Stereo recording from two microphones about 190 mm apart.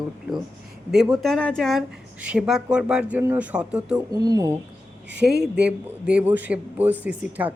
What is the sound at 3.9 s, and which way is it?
Speech, 20° right (ahead or behind).